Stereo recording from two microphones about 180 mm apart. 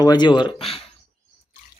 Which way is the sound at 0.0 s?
25° left (ahead or behind).